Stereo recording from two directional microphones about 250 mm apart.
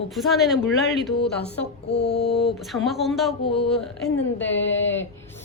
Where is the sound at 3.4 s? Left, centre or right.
Left.